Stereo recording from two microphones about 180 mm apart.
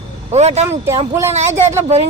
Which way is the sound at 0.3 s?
35° right (ahead or behind).